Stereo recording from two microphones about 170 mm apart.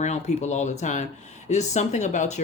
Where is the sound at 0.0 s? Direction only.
40° left (ahead or behind).